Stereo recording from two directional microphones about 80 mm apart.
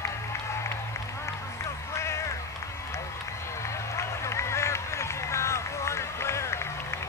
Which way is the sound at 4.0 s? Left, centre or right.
Left.